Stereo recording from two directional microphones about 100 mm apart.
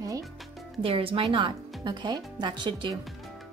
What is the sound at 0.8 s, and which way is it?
Speech, 65° right (ahead or behind).